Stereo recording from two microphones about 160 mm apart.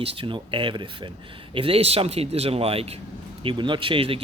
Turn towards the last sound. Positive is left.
turn(degrees=-35)  # may be behind; listen again after turning